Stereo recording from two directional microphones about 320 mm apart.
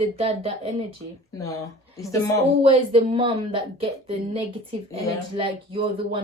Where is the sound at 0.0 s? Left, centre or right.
Centre.